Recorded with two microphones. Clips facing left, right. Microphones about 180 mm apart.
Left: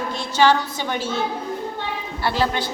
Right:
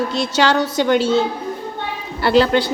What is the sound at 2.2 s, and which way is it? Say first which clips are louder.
Speech: right 8 dB; 70° right (ahead or behind).